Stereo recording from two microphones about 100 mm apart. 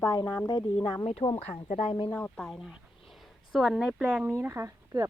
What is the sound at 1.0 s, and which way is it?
Speech, 80° left.